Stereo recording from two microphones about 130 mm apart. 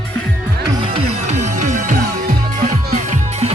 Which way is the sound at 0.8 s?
55° right (ahead or behind).